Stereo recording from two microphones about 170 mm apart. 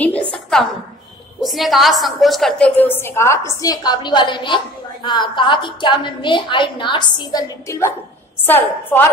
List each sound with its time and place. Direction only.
0.0 s a sound: 10° left (ahead or behind)
1.4 s a woman's voice: centre (ahead or behind)
2.8 s a woman's voice: 10° left (ahead or behind)